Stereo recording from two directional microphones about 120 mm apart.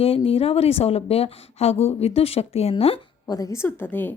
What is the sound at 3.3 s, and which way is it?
Speech, 30° left (ahead or behind).